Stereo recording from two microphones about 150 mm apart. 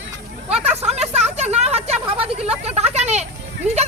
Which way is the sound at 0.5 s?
45° right (ahead or behind).